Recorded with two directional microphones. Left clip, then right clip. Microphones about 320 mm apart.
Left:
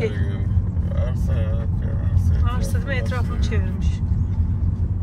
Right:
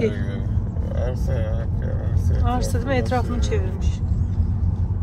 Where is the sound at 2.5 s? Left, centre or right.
Centre.